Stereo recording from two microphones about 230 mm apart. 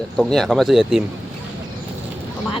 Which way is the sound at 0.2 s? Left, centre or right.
Centre.